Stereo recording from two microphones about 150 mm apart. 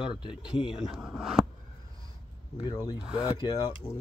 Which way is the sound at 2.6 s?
25° left (ahead or behind).